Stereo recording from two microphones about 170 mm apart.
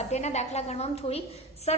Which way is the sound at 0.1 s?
40° left (ahead or behind).